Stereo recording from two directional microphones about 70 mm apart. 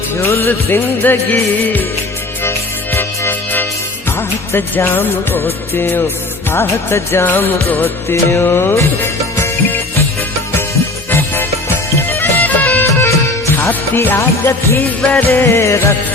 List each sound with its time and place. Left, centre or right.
0.2 s music: left
7.3 s music: left
11.1 s music: left
12.5 s music: left
12.8 s music: left
14.2 s music: left